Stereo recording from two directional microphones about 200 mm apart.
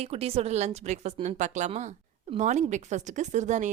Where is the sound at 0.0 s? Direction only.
30° right (ahead or behind).